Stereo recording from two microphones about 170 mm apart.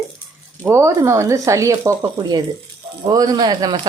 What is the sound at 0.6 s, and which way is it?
Speech, 15° right (ahead or behind).